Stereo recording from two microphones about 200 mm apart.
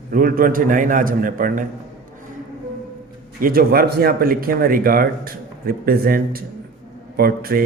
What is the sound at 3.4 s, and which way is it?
A man's voice, 50° right (ahead or behind).